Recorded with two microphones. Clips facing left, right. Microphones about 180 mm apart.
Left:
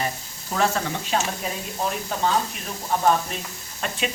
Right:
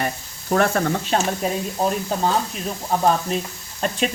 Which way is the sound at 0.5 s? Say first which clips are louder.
Right 5 dB; 55° right (ahead or behind).